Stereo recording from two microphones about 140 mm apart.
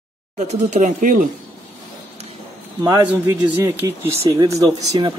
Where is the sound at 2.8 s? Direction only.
25° right (ahead or behind).